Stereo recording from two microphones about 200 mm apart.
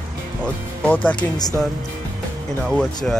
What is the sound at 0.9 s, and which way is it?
Speech, 5° left (ahead or behind).